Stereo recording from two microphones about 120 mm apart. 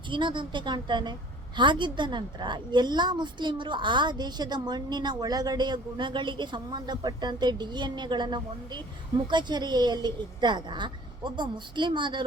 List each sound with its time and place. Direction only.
0.1 s a woman's voice: 40° right (ahead or behind)